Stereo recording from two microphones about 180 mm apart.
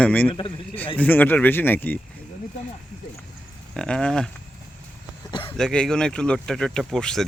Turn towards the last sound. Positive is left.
turn(degrees=5)  # may be behind; listen again after turning